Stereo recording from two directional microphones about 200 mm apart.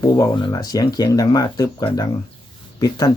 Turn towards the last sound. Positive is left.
turn(degrees=20)  # may be behind; listen again after turning